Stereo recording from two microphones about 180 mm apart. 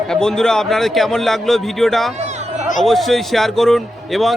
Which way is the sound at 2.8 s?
Centre (ahead or behind).